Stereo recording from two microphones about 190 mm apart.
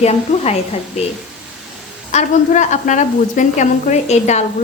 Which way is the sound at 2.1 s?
40° left (ahead or behind).